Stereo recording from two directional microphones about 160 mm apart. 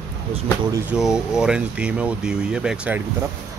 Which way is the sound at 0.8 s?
5° right (ahead or behind).